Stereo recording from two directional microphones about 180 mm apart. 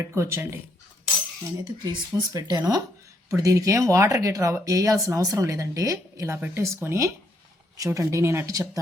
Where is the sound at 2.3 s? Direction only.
20° right (ahead or behind).